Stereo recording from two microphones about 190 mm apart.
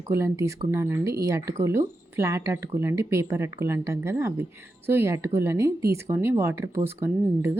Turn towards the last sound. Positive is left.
turn(degrees=-10)  # may be behind; listen again after turning